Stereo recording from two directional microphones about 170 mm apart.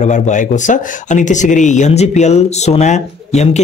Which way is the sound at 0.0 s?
45° left (ahead or behind).